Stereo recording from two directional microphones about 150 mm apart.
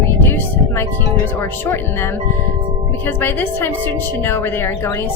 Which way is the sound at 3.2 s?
15° left (ahead or behind).